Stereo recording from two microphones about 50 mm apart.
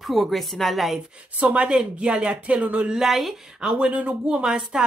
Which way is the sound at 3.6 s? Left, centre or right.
Centre.